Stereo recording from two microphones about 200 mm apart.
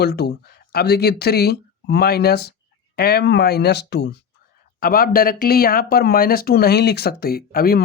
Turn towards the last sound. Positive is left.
turn(degrees=50)  # may be behind; listen again after turning